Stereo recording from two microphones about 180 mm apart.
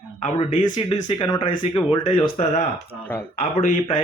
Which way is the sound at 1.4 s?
25° left (ahead or behind).